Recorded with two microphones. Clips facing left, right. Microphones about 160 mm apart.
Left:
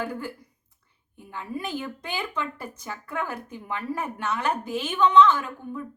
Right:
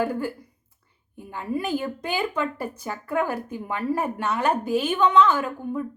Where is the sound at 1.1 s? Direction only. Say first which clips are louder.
Right 3 dB; 40° right (ahead or behind).